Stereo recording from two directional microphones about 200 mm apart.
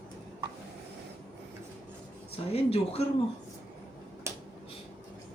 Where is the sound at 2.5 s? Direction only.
30° left (ahead or behind).